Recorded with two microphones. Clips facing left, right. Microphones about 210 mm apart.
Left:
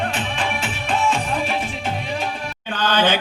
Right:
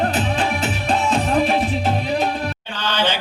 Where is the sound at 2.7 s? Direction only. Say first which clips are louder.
Left 4 dB; 55° left (ahead or behind).